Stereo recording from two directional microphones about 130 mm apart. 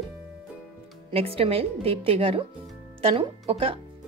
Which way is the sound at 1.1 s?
45° right (ahead or behind).